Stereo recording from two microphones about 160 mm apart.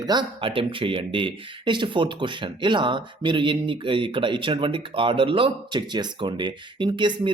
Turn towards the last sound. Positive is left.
turn(degrees=-30)  # may be behind; listen again after turning